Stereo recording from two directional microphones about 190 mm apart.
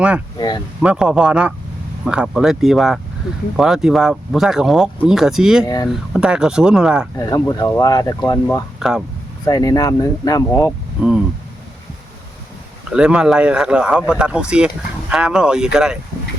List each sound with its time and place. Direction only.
0.3 s a sound: 20° left (ahead or behind)
0.8 s speech: 5° right (ahead or behind)
5.6 s speech: 20° left (ahead or behind)
5.9 s speech: 5° right (ahead or behind)
7.2 s speech: 20° left (ahead or behind)
8.8 s speech: 5° right (ahead or behind)
9.4 s speech: 15° left (ahead or behind)
12.9 s speech: 5° right (ahead or behind)